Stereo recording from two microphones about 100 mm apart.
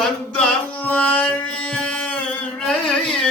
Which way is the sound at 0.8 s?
15° left (ahead or behind).